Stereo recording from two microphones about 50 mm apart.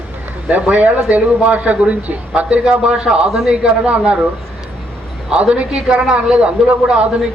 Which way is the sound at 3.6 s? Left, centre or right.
Right.